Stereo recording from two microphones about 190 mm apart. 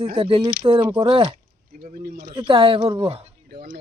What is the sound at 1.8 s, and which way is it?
Speech, 50° right (ahead or behind).